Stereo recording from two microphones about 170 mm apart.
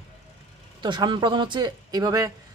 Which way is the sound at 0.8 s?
25° right (ahead or behind).